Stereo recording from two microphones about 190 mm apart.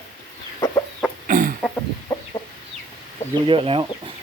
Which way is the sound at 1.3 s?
45° right (ahead or behind).